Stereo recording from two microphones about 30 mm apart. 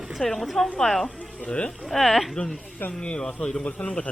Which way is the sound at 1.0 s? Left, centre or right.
Left.